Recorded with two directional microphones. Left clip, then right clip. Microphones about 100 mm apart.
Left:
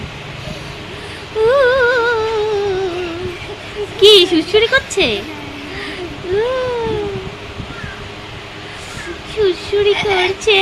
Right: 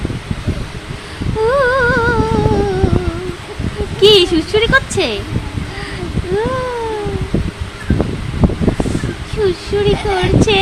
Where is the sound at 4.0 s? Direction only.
10° right (ahead or behind).